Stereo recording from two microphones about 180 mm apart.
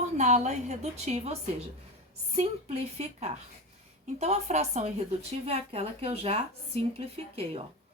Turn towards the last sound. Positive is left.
turn(degrees=-35)  # may be behind; listen again after turning